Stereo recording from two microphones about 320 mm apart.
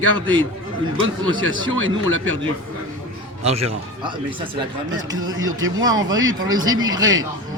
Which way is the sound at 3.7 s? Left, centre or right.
Centre.